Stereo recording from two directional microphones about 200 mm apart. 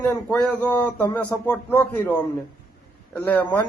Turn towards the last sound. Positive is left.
turn(degrees=10)  # may be behind; listen again after turning